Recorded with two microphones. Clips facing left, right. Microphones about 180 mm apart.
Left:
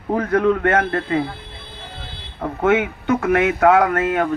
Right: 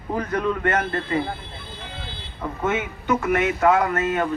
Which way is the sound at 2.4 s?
60° left (ahead or behind).